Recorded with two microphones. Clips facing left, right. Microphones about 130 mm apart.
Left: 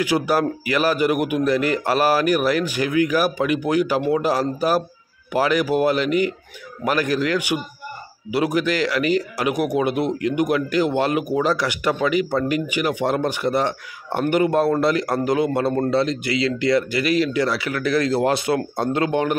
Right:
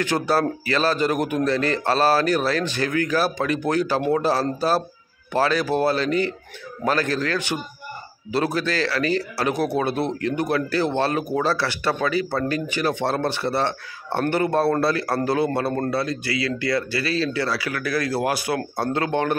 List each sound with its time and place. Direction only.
0.0 s speech: 10° left (ahead or behind)